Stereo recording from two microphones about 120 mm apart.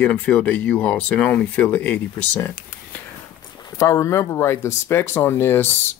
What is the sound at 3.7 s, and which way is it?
Speech, 25° left (ahead or behind).